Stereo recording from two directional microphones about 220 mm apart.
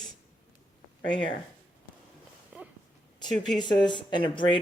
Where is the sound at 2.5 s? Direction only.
5° right (ahead or behind).